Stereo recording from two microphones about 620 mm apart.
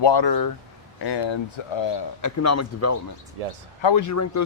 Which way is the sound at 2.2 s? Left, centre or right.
Left.